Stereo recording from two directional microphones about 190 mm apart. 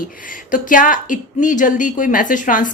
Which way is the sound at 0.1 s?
45° left (ahead or behind).